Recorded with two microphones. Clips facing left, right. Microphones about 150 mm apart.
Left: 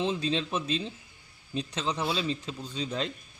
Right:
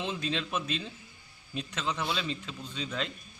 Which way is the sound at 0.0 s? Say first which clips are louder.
Left 5 dB; 30° left (ahead or behind).